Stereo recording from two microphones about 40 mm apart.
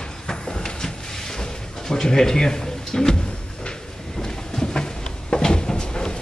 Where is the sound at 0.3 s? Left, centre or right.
Centre.